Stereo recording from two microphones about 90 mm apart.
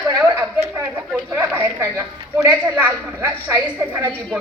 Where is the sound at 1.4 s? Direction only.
25° right (ahead or behind).